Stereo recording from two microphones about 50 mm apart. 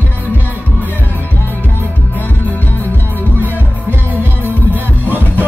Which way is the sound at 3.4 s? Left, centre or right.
Right.